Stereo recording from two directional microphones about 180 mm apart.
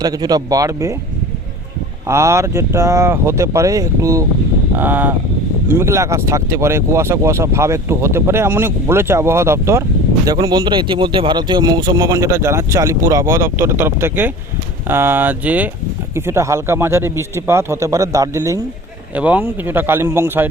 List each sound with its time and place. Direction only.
0.0 s speech: 20° right (ahead or behind)
2.0 s speech: 15° right (ahead or behind)